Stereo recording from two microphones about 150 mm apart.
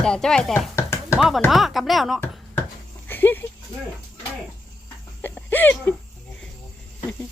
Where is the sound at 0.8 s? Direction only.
15° left (ahead or behind).